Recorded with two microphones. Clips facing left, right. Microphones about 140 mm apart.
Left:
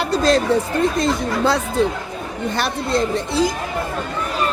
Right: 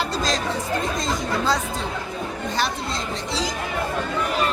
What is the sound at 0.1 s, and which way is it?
Chatter, 60° left (ahead or behind).